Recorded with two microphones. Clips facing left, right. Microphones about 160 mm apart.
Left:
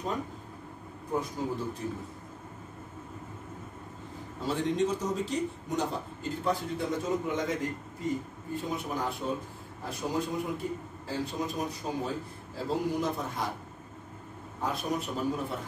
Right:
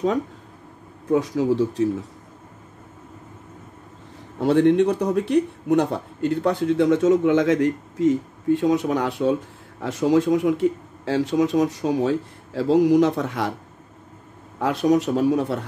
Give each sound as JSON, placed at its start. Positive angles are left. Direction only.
{"t": 1.0, "sound": "speech", "side_deg": -90}
{"t": 4.4, "sound": "speech", "side_deg": -65}
{"t": 14.6, "sound": "speech", "side_deg": -90}